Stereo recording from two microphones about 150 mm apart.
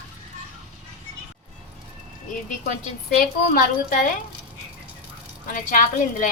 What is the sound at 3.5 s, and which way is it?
Speech, 65° left (ahead or behind).